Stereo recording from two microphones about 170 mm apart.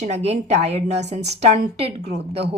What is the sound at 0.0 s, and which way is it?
A woman's voice, 40° right (ahead or behind).